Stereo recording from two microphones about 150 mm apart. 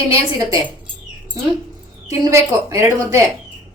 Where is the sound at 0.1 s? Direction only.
20° right (ahead or behind).